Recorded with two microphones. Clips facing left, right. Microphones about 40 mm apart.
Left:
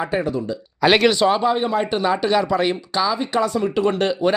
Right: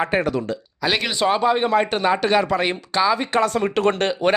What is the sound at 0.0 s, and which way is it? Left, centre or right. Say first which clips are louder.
Speech: right 2 dB; right.